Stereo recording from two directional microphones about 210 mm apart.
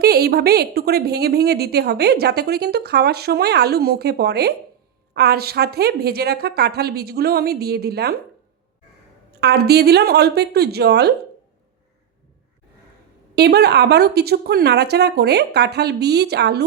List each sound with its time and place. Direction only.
0.0 s a woman's voice: 50° right (ahead or behind)
9.3 s a woman's voice: 50° right (ahead or behind)
13.3 s a woman's voice: 50° right (ahead or behind)